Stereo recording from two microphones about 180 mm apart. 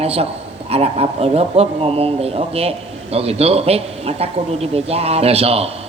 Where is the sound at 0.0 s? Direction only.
35° right (ahead or behind).